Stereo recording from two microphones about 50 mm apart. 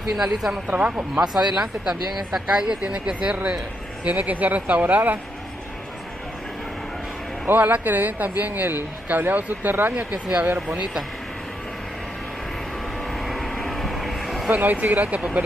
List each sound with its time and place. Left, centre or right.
0.1 s speech: centre
0.7 s speech: right
1.3 s speech: centre; by 5.2 s right
7.4 s speech: right
10.1 s speech: right
13.2 s vehicle: centre
14.5 s speech: right